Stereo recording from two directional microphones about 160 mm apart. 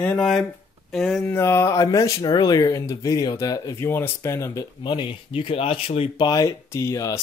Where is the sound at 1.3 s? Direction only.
15° left (ahead or behind).